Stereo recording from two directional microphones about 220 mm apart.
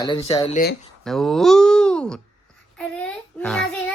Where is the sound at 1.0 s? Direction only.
Centre (ahead or behind).